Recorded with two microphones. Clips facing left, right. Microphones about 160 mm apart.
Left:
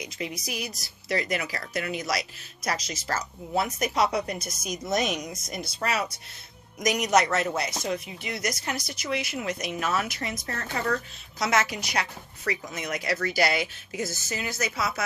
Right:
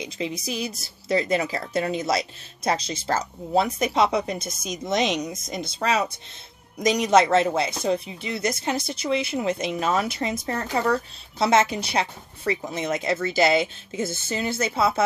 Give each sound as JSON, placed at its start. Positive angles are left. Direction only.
{"t": 0.0, "sound": "speech", "side_deg": -25}